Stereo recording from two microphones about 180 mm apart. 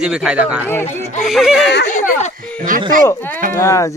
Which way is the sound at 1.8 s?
45° left (ahead or behind).